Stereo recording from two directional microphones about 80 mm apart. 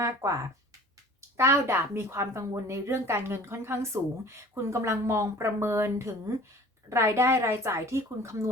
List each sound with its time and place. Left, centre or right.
0.0 s speech: right
1.4 s a woman's voice: right